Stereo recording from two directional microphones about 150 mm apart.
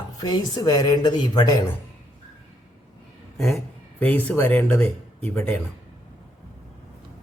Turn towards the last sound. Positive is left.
turn(degrees=10)  # may be behind; listen again after turning